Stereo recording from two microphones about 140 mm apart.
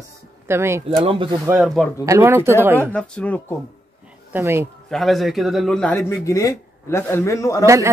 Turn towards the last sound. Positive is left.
turn(degrees=20)  # may be behind; listen again after turning